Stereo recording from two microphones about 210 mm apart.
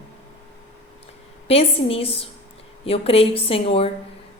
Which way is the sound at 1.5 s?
25° left (ahead or behind).